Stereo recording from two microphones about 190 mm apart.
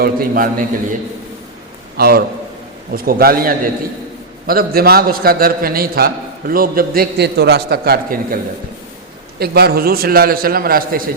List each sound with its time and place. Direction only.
0.0 s a man's voice: 50° right (ahead or behind)
2.0 s a man's voice: 55° right (ahead or behind)
9.4 s a man's voice: 55° right (ahead or behind)